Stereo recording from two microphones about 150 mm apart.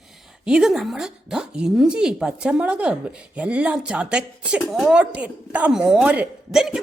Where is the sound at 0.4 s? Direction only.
5° right (ahead or behind).